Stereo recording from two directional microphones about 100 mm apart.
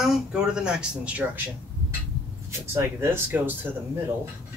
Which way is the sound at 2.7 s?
25° right (ahead or behind).